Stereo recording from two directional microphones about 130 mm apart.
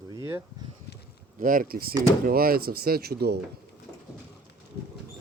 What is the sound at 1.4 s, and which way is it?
Speech, 90° right.